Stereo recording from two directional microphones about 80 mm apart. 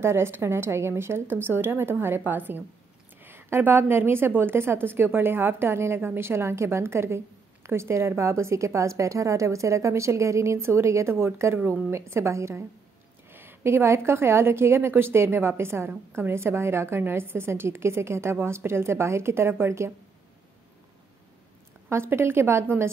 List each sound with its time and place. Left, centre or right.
0.0 s a woman's voice: right
21.8 s a woman's voice: right